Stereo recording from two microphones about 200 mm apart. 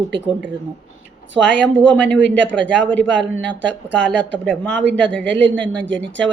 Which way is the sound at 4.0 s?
5° left (ahead or behind).